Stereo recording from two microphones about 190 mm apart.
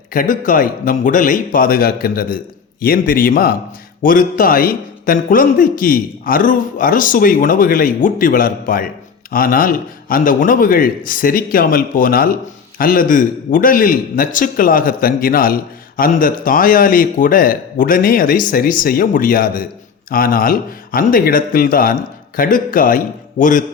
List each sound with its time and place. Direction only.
0.1 s a man's voice: 45° left (ahead or behind)